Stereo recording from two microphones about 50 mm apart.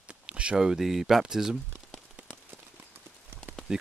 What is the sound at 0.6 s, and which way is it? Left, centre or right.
Speech, centre.